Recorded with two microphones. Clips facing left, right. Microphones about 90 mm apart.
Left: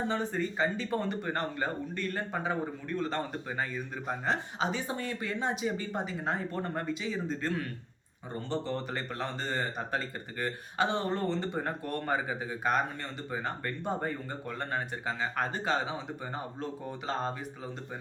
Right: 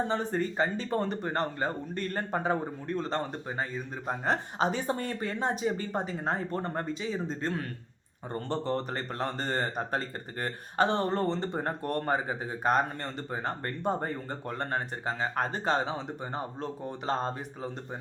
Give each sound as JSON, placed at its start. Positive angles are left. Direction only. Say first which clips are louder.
{"t": 0.1, "sound": "speech", "louder": "right 2 dB", "side_deg": -40}
{"t": 4.5, "sound": "speech", "louder": "right 4 dB", "side_deg": -45}
{"t": 8.3, "sound": "speech", "louder": "right 3 dB", "side_deg": -45}